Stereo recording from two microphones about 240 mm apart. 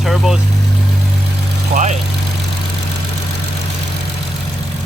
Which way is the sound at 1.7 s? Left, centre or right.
Right.